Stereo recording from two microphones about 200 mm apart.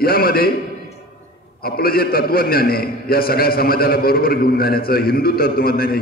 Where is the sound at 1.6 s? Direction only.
50° left (ahead or behind).